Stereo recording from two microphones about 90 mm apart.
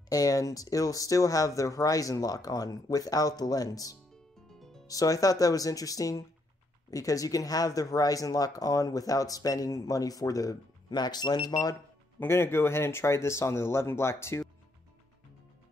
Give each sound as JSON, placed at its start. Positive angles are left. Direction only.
{"t": 0.1, "sound": "speech", "side_deg": 40}
{"t": 4.6, "sound": "music", "side_deg": 5}
{"t": 4.8, "sound": "speech", "side_deg": 40}
{"t": 12.2, "sound": "speech", "side_deg": 25}